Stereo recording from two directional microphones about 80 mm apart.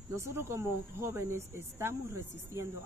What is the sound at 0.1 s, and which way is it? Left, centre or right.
Speech, right.